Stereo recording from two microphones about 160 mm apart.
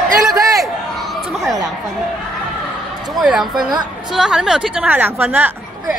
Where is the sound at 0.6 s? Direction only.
Centre (ahead or behind).